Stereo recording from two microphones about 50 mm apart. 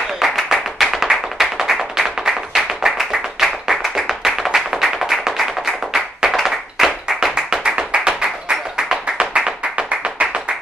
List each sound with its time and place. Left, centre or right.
0.2 s music: centre
3.1 s clapping: centre
4.6 s music: centre
5.9 s clapping: centre